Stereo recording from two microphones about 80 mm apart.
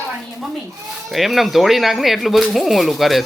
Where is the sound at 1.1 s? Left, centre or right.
Centre.